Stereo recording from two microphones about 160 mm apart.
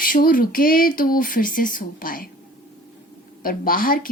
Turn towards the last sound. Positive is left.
turn(degrees=60)  # may be behind; listen again after turning